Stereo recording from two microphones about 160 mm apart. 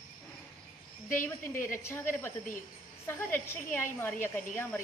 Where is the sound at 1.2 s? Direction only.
15° left (ahead or behind).